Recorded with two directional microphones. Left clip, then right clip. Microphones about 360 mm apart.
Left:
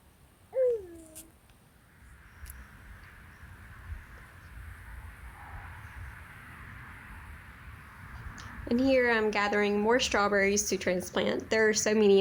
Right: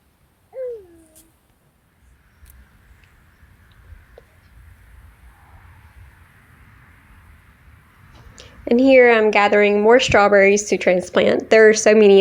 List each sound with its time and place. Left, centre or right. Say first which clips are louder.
8.4 s a woman's voice: right 14 dB; left